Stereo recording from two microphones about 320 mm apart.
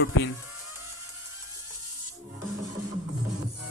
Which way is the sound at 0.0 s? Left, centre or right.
Left.